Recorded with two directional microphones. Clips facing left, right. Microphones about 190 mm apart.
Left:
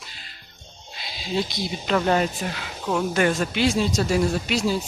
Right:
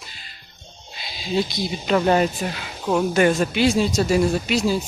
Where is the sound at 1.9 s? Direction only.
15° right (ahead or behind).